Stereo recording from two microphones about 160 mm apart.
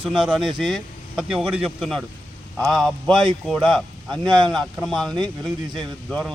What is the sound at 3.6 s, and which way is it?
Speech, centre (ahead or behind).